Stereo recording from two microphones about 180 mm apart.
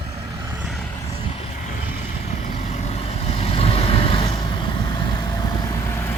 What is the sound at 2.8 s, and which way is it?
Vehicle, 35° left (ahead or behind).